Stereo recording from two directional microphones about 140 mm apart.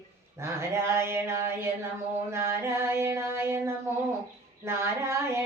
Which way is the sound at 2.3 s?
20° right (ahead or behind).